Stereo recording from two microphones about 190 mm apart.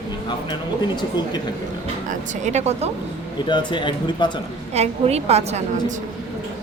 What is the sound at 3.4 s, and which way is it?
Speech, 25° left (ahead or behind).